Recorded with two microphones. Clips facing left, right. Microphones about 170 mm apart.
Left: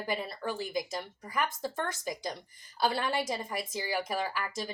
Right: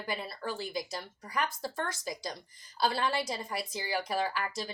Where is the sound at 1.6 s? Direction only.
15° left (ahead or behind).